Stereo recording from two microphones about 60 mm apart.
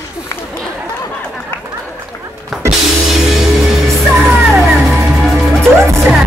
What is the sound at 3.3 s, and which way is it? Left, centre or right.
Music, centre.